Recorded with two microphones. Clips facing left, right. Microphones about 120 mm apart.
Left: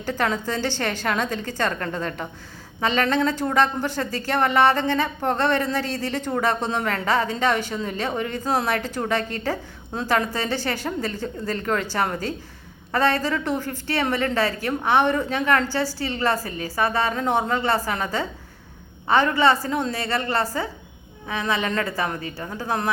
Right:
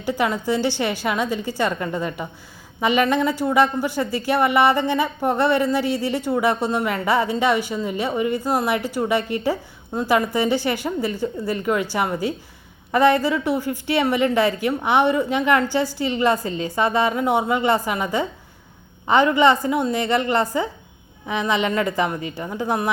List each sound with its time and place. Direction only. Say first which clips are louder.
0.0 s speech: right 2 dB; 15° right (ahead or behind)